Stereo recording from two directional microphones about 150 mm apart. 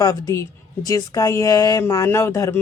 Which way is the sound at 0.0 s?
25° left (ahead or behind).